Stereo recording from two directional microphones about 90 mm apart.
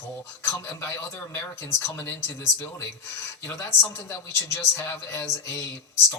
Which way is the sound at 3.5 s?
35° left (ahead or behind).